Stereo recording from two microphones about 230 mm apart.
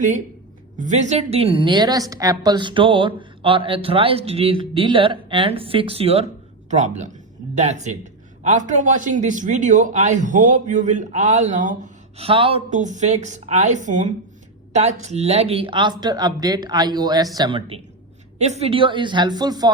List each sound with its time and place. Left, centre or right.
0.8 s a woman's voice: right